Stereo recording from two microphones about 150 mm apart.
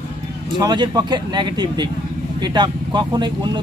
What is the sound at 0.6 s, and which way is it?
Speech, 30° right (ahead or behind).